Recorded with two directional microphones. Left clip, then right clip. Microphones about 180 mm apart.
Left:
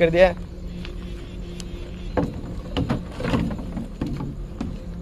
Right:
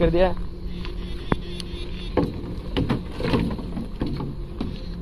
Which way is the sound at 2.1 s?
45° right (ahead or behind).